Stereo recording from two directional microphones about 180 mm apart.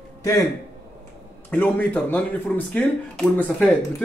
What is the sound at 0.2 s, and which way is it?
Speech, 20° left (ahead or behind).